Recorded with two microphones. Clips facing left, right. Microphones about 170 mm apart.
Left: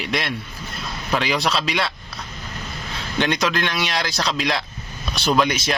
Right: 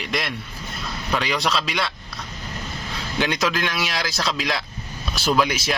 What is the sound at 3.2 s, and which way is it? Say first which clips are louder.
Speech: left 2 dB; 5° right (ahead or behind).